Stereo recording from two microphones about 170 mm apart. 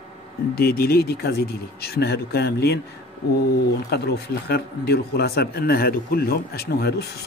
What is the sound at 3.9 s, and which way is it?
Speech, 70° left (ahead or behind).